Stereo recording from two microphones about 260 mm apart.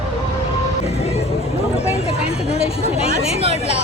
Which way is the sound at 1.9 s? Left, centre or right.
Left.